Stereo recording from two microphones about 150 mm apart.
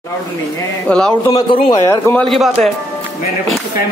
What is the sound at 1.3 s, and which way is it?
Speech, 30° left (ahead or behind).